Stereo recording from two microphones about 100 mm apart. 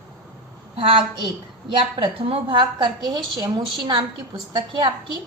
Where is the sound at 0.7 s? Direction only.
65° right (ahead or behind); by 4.9 s 45° right (ahead or behind).